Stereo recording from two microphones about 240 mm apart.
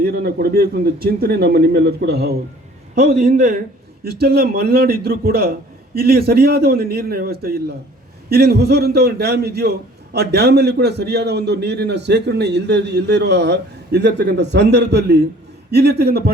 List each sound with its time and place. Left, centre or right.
0.0 s a man's voice: right